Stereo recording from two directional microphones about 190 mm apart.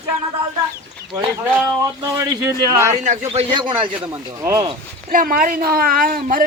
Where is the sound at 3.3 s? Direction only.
30° right (ahead or behind).